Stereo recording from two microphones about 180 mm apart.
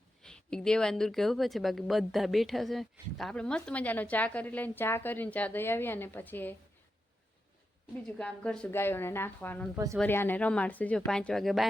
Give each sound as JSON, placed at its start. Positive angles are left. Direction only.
{"t": 0.2, "sound": "speech", "side_deg": 5}
{"t": 8.0, "sound": "speech", "side_deg": 5}
{"t": 9.7, "sound": "speech", "side_deg": -15}
{"t": 10.0, "sound": "speech", "side_deg": 10}